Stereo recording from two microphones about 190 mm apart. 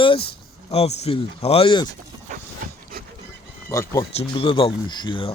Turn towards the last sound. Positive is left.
turn(degrees=25)  # may be behind; listen again after turning